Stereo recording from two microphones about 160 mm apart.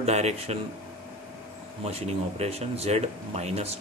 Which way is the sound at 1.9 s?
40° right (ahead or behind).